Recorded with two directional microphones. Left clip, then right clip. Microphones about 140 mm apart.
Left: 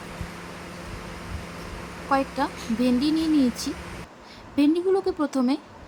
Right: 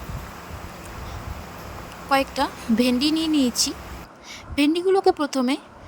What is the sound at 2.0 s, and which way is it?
Speech, 60° right (ahead or behind).